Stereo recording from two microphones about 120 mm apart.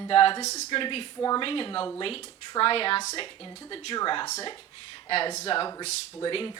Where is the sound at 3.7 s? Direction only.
45° left (ahead or behind).